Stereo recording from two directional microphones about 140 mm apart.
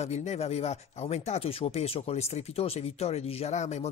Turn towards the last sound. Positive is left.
turn(degrees=55)  # may be behind; listen again after turning